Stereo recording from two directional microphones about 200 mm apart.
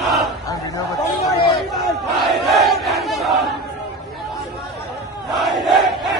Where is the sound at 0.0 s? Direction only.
Centre (ahead or behind).